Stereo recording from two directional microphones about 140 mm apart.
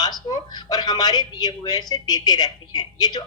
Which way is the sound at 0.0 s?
30° left (ahead or behind).